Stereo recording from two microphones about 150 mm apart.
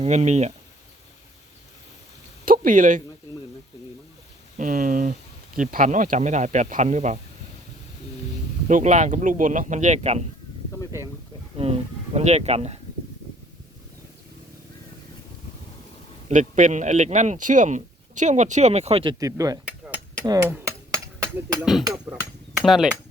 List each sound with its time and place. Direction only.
0.0 s speech: 50° right (ahead or behind)
2.4 s a sound: 65° right (ahead or behind)
4.5 s speech: 65° right (ahead or behind)
8.6 s speech: 55° right (ahead or behind)
10.8 s speech: 20° left (ahead or behind)
11.5 s speech: 40° right (ahead or behind)
16.3 s speech: 55° right (ahead or behind)
19.2 s speech: 20° right (ahead or behind)
19.6 s cutlery: 10° right (ahead or behind)
20.2 s a sound: 20° right (ahead or behind)
21.6 s speech: centre (ahead or behind)
22.1 s hammer: 5° right (ahead or behind)